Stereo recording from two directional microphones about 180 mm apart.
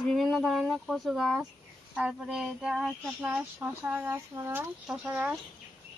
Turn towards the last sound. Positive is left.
turn(degrees=-5)  # may be behind; listen again after turning